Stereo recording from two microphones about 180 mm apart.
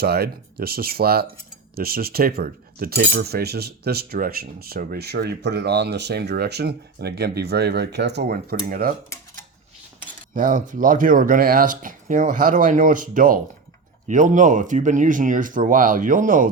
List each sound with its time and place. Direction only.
0.0 s cutlery: 60° right (ahead or behind)
10.3 s speech: 45° right (ahead or behind)